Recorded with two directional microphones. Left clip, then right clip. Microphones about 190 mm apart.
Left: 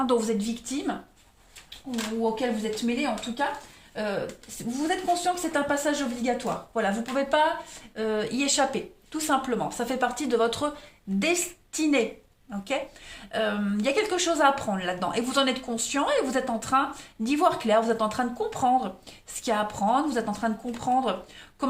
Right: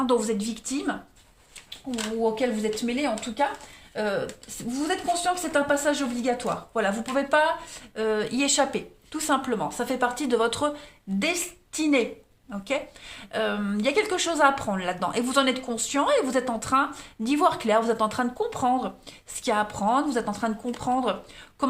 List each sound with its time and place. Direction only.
0.0 s a woman's voice: 25° right (ahead or behind)